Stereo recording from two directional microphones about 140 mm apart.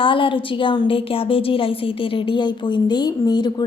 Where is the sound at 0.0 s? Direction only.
40° left (ahead or behind).